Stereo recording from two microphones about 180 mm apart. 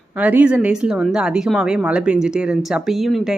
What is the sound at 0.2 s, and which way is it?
Speech, 10° right (ahead or behind).